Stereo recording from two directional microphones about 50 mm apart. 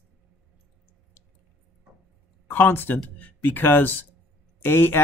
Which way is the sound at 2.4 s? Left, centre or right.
Left.